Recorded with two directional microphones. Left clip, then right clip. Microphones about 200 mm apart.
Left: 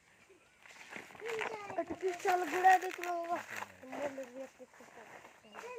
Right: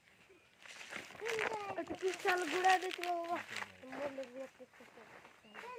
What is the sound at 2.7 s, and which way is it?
Speech, 25° right (ahead or behind).